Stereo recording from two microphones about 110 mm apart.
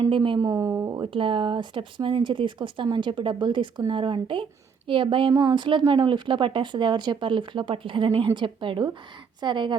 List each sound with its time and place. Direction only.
0.1 s speech: 50° right (ahead or behind)
0.3 s a woman's voice: 35° right (ahead or behind)
1.1 s speech: 50° right (ahead or behind)